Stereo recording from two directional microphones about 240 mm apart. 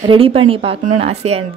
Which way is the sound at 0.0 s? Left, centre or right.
Right.